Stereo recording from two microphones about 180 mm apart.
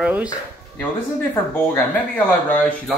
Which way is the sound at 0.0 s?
5° right (ahead or behind).